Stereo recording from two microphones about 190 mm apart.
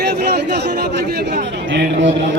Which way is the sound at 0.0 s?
60° right (ahead or behind).